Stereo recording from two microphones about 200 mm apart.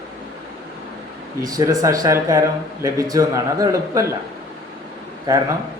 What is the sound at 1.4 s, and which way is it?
A man's voice, 15° right (ahead or behind).